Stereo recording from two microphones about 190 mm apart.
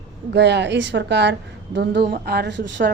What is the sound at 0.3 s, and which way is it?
A woman's voice, 65° right (ahead or behind).